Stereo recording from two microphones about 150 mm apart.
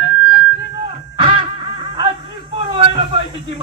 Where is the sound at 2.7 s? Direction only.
35° right (ahead or behind).